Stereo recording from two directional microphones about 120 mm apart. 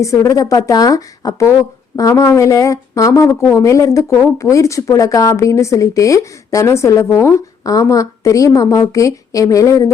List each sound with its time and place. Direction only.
0.0 s speech: 25° left (ahead or behind)